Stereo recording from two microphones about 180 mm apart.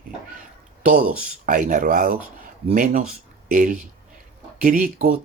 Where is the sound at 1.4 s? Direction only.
45° right (ahead or behind).